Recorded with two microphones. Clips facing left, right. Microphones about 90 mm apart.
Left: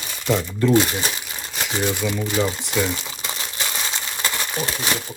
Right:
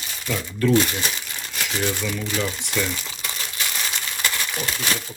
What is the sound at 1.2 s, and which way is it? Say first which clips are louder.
Crumpling: left 1 dB; 15° left (ahead or behind).